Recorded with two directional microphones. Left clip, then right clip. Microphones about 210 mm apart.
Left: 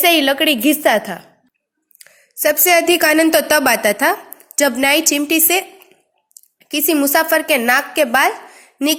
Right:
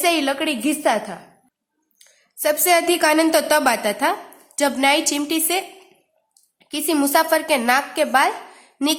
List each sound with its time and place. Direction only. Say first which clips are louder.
0.0 s a woman's voice: left 6 dB; 15° left (ahead or behind)
2.0 s a sound: left 7 dB; 20° left (ahead or behind)
2.6 s a woman's voice: left 4 dB; 20° left (ahead or behind)
6.7 s a woman's voice: left 4 dB; 15° left (ahead or behind)